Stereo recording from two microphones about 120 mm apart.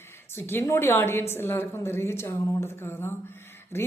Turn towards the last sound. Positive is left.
turn(degrees=20)  # may be behind; listen again after turning